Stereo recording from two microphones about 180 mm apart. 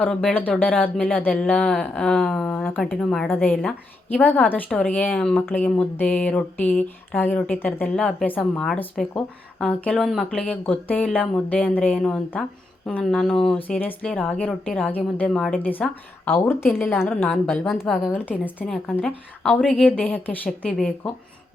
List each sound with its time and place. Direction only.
0.0 s speech: 5° left (ahead or behind)
17.1 s a woman's voice: 5° left (ahead or behind)